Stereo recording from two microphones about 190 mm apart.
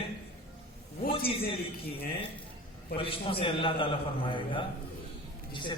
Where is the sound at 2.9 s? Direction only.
30° left (ahead or behind).